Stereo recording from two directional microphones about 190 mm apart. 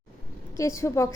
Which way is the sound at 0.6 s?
15° left (ahead or behind).